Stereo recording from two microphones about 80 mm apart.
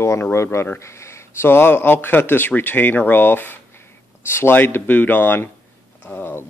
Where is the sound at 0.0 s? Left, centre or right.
Left.